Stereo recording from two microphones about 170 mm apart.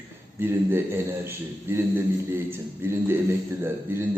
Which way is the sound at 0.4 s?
15° right (ahead or behind).